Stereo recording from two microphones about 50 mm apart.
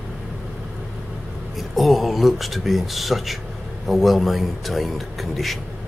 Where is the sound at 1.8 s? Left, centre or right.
Centre.